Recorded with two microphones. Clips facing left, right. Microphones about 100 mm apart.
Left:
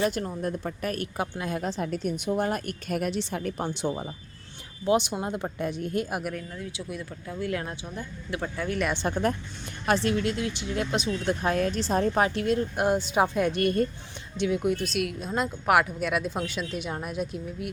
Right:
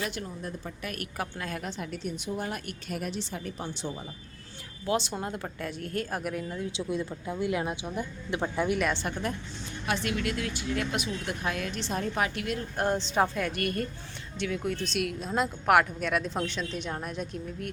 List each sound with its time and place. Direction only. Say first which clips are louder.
0.0 s a woman's voice: left 8 dB; 45° left (ahead or behind)
0.9 s speech: left 5 dB; 25° left (ahead or behind)
1.6 s a woman's voice: left 6 dB; 40° left (ahead or behind)
3.0 s a woman's voice: left 6 dB; 65° left (ahead or behind)
4.9 s speech: left 5 dB; 15° left (ahead or behind)
6.5 s speech: right 4 dB; 25° right (ahead or behind)
9.0 s speech: left 6 dB; 30° left (ahead or behind)
12.7 s speech: left 3 dB; 10° left (ahead or behind)
14.8 s speech: left 2 dB; centre (ahead or behind)